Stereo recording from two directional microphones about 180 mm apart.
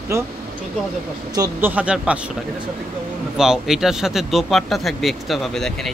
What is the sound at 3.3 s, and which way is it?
Speech, 5° right (ahead or behind).